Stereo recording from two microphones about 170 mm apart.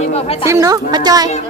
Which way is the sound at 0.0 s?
40° left (ahead or behind).